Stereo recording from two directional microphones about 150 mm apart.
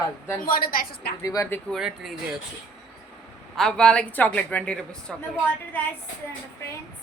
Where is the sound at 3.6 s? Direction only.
5° left (ahead or behind).